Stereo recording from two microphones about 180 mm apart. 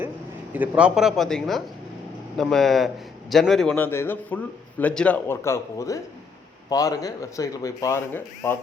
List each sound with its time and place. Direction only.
0.5 s a man's voice: 5° right (ahead or behind); by 8.5 s 10° left (ahead or behind)